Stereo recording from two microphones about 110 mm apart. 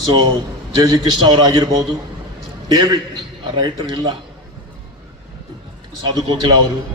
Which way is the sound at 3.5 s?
45° right (ahead or behind).